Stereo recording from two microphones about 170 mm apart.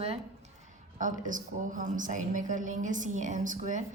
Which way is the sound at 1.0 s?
50° right (ahead or behind).